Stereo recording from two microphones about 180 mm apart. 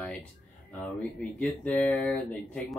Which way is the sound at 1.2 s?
5° left (ahead or behind).